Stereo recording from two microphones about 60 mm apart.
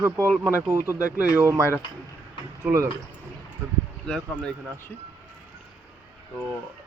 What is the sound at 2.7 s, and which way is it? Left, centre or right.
Speech, right.